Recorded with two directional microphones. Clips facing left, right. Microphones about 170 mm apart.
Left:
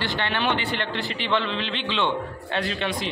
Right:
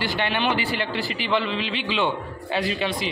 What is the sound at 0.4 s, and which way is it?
A man's voice, 5° right (ahead or behind).